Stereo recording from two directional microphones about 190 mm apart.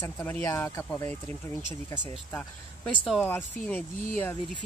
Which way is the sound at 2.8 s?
Centre (ahead or behind).